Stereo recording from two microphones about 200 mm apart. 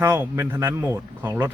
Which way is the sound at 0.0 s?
15° right (ahead or behind).